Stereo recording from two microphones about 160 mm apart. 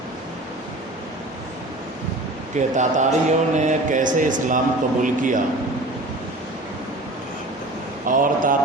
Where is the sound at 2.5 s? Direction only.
50° right (ahead or behind).